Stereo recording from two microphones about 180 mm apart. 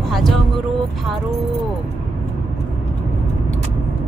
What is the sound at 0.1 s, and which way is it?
Vehicle, centre (ahead or behind).